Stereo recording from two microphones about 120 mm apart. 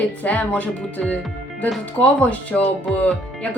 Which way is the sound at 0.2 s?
10° left (ahead or behind).